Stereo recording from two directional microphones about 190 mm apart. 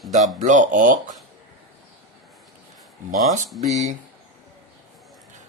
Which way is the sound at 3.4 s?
Centre (ahead or behind).